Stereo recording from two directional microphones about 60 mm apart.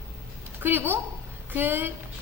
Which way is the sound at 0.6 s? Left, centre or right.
Right.